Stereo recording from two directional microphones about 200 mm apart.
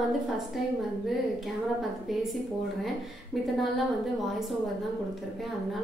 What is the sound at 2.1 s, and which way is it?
A woman's voice, centre (ahead or behind).